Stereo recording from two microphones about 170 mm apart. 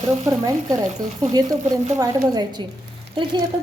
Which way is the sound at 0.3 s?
20° right (ahead or behind).